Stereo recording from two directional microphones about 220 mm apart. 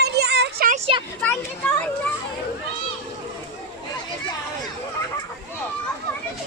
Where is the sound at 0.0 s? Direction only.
50° right (ahead or behind).